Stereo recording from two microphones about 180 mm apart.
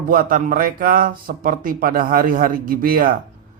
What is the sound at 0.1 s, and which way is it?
Speech, 50° right (ahead or behind).